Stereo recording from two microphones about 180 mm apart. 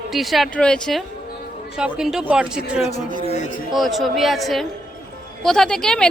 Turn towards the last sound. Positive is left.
turn(degrees=5)  # may be behind; listen again after turning